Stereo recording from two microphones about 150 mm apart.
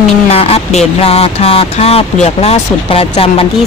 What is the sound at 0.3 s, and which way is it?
Speech, 40° left (ahead or behind).